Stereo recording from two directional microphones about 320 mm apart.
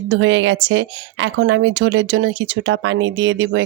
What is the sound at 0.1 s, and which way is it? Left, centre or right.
Speech, right.